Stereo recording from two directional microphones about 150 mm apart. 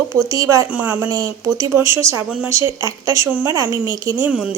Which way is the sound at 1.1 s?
25° right (ahead or behind).